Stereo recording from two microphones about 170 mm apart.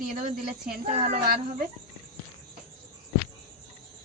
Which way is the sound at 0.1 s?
50° right (ahead or behind).